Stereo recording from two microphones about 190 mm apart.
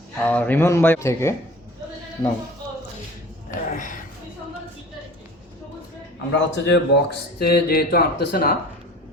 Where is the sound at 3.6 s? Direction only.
45° left (ahead or behind).